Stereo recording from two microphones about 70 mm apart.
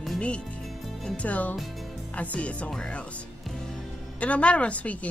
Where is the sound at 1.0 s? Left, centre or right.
Centre.